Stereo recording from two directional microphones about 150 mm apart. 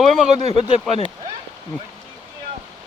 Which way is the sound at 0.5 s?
35° left (ahead or behind).